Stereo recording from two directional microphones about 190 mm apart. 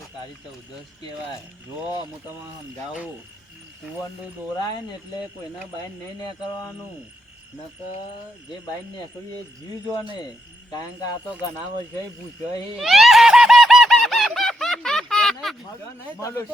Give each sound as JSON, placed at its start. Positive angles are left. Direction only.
{"t": 10.7, "sound": "speech", "side_deg": 20}
{"t": 12.7, "sound": "a sound", "side_deg": 0}
{"t": 16.2, "sound": "speech", "side_deg": 15}